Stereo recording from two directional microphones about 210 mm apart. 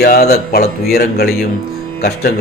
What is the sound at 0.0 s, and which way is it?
Speech, 50° left (ahead or behind).